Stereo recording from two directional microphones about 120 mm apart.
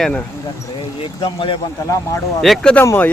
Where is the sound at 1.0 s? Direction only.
45° left (ahead or behind).